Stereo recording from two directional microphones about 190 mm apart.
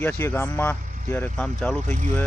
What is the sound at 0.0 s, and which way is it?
Speech, 10° left (ahead or behind).